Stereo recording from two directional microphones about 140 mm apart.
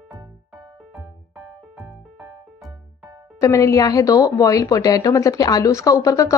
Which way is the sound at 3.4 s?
20° left (ahead or behind).